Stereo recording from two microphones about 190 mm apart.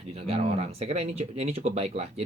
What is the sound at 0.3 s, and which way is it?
Speech, 30° right (ahead or behind).